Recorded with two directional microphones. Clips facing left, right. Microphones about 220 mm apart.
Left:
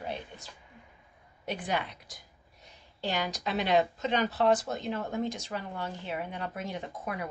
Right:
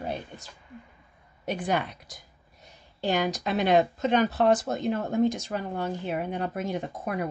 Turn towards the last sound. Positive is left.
turn(degrees=-45)  # may be behind; listen again after turning